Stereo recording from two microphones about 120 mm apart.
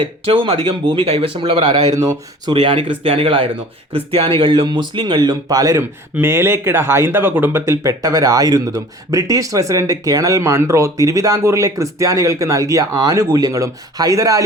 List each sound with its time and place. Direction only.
0.0 s speech: 50° right (ahead or behind); by 2.1 s 30° right (ahead or behind)
2.5 s speech: 45° right (ahead or behind); by 14.4 s 30° right (ahead or behind)